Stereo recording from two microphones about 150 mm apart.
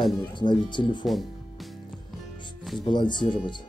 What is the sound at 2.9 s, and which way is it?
Speech, 30° left (ahead or behind).